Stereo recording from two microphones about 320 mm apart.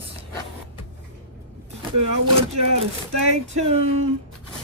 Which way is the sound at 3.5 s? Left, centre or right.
Centre.